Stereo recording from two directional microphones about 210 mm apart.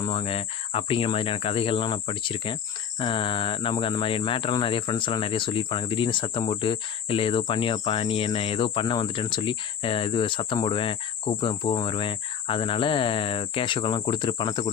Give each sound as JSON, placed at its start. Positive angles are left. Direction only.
{"t": 0.0, "sound": "speech", "side_deg": 25}